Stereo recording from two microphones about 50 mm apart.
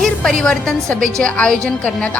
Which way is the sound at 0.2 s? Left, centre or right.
Centre.